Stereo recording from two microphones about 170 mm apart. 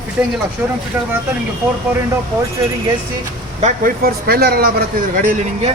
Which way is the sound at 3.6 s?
55° right (ahead or behind).